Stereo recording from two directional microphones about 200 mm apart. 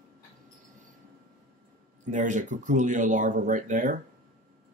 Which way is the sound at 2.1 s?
40° right (ahead or behind).